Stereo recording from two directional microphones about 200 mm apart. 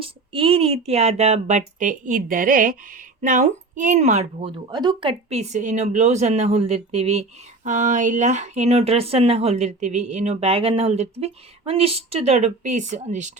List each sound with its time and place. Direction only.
0.0 s speech: 25° right (ahead or behind)